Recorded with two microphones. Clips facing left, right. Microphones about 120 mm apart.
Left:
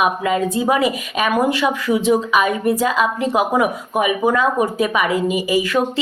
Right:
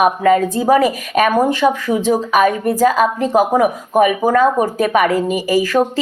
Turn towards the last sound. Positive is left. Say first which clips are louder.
# right 3 dB
turn(degrees=-40)  # may be behind; listen again after turning